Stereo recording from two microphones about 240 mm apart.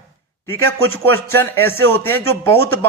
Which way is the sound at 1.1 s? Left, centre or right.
Centre.